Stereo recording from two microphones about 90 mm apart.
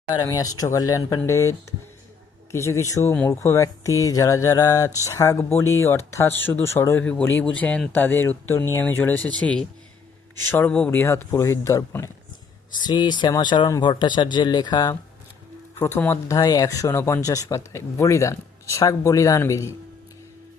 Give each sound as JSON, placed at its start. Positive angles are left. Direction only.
{"t": 0.1, "sound": "speech", "side_deg": 40}
{"t": 7.0, "sound": "speech", "side_deg": 15}
{"t": 10.7, "sound": "speech", "side_deg": 15}
{"t": 10.9, "sound": "speech", "side_deg": 25}
{"t": 12.7, "sound": "speech", "side_deg": 55}
{"t": 15.8, "sound": "speech", "side_deg": 25}
{"t": 16.4, "sound": "speech", "side_deg": 40}